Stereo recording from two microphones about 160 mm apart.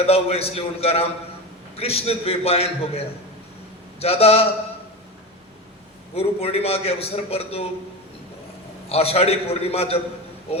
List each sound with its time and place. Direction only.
0.0 s a man's voice: 40° left (ahead or behind)
4.0 s a man's voice: 40° left (ahead or behind)
6.1 s a man's voice: 40° left (ahead or behind)
8.9 s a man's voice: 40° left (ahead or behind)